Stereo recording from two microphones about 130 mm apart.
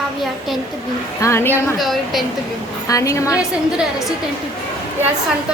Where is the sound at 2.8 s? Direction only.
25° left (ahead or behind).